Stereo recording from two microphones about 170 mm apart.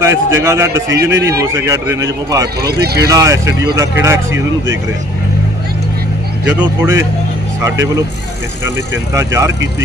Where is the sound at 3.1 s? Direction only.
20° right (ahead or behind).